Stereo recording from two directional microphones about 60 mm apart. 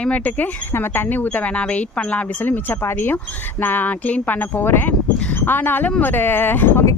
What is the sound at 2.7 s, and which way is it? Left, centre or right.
Speech, left.